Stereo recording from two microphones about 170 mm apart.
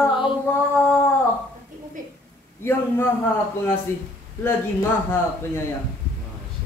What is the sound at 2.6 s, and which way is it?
Speech, 15° left (ahead or behind).